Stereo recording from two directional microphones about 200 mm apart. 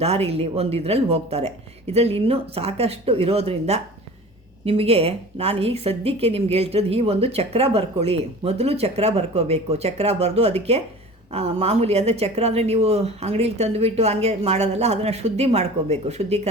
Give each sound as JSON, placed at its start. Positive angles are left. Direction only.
{"t": 0.0, "sound": "a woman's voice", "side_deg": -30}